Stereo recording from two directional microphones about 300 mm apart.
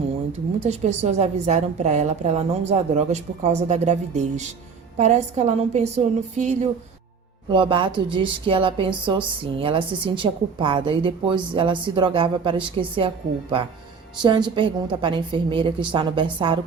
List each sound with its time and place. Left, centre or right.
0.6 s a woman's voice: right
14.2 s a woman's voice: centre